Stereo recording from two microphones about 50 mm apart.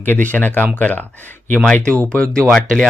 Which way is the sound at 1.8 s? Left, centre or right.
Left.